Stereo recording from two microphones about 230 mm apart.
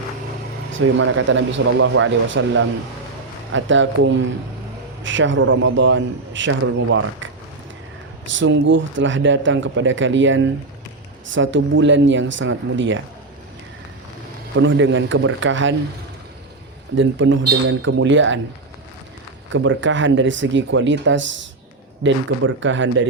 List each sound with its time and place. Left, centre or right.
0.7 s a man's voice: right
5.0 s a man's voice: right
8.4 s a man's voice: right
14.5 s a man's voice: right
16.9 s a man's voice: right
19.5 s a man's voice: right